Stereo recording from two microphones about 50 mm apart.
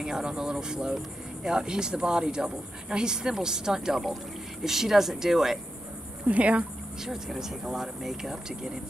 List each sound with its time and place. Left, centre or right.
0.0 s speech: centre
6.2 s speech: right
7.1 s speech: centre